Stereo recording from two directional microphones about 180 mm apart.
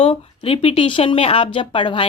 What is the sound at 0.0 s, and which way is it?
A woman's voice, 30° left (ahead or behind).